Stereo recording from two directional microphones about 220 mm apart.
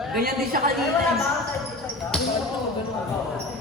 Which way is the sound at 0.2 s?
45° right (ahead or behind).